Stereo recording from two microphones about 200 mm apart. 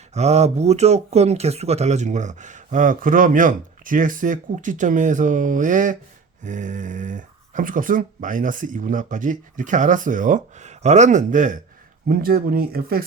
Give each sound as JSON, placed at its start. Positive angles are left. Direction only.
{"t": 0.1, "sound": "speech", "side_deg": -35}